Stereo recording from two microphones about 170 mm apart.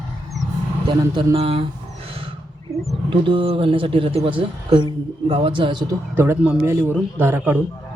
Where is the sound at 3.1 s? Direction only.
30° right (ahead or behind).